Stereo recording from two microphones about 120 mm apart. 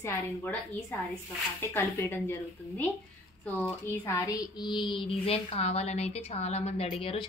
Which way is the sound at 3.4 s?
15° left (ahead or behind).